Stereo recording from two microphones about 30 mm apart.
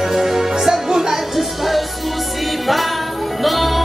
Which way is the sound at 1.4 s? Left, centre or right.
Centre.